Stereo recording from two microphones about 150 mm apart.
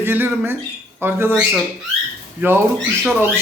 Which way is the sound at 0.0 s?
15° right (ahead or behind).